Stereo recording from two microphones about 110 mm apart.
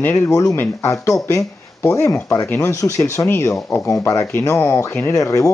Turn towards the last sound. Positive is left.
turn(degrees=30)  # may be behind; listen again after turning